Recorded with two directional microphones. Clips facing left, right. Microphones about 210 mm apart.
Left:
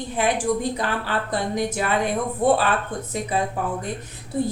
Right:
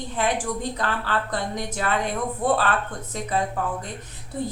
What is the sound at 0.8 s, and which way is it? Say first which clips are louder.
A woman's voice: left 1 dB; 10° left (ahead or behind).